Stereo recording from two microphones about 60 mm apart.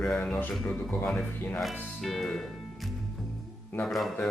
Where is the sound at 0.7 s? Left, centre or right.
Centre.